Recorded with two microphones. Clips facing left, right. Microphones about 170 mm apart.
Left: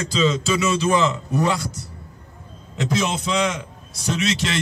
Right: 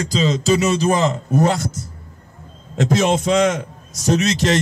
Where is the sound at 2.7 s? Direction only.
50° right (ahead or behind).